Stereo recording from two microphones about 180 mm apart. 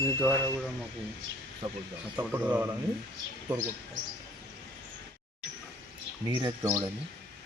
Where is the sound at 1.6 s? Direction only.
40° right (ahead or behind).